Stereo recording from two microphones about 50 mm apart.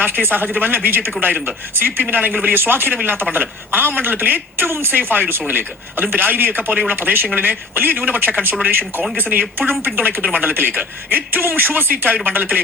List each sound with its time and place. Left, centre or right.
0.0 s a man's voice: right
2.6 s a man's voice: right
6.9 s a man's voice: right
10.2 s a man's voice: right